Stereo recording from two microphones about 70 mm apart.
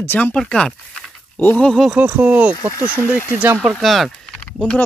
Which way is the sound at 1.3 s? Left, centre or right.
Left.